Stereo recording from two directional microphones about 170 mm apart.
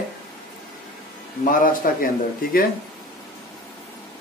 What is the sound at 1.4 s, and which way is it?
Speech, 55° left (ahead or behind).